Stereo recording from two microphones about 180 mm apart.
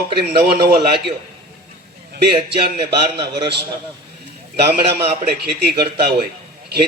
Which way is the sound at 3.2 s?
25° right (ahead or behind).